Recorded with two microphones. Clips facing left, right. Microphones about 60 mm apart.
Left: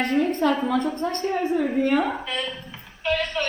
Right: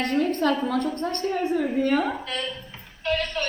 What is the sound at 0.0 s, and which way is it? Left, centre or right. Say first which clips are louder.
A woman's voice: left 1 dB; centre.